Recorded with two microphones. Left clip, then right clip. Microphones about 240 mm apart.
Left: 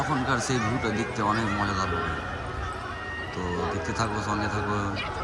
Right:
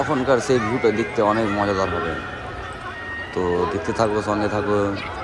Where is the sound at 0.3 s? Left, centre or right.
Centre.